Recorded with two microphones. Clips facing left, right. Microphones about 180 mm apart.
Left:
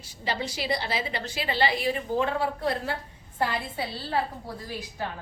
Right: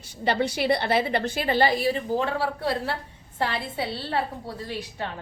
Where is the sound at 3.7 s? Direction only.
25° right (ahead or behind).